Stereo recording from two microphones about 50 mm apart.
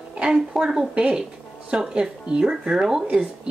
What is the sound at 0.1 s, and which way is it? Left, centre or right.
Speech, centre.